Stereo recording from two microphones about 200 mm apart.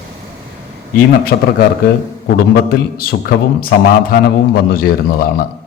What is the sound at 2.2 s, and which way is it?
A man's voice, 50° left (ahead or behind).